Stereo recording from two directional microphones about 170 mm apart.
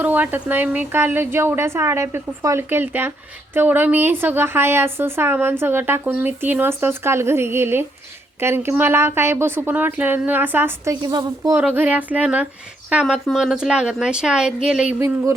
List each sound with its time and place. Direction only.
0.0 s a woman's voice: 10° right (ahead or behind)
11.0 s speech: 25° right (ahead or behind)
11.5 s a woman's voice: 10° right (ahead or behind)
14.9 s a woman's voice: 15° right (ahead or behind)